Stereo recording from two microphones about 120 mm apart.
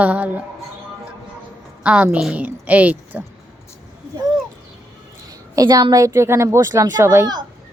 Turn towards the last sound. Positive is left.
turn(degrees=-20)  # may be behind; listen again after turning